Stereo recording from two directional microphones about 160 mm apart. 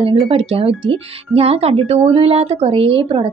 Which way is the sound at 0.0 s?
35° right (ahead or behind).